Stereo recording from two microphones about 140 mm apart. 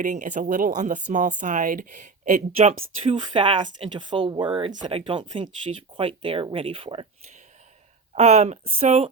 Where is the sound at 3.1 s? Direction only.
35° right (ahead or behind).